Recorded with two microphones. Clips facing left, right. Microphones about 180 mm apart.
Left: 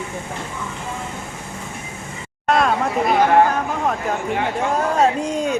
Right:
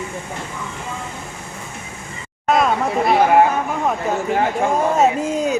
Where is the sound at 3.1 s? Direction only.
5° right (ahead or behind).